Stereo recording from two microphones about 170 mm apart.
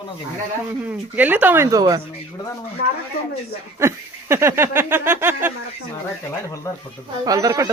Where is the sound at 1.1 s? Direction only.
10° right (ahead or behind).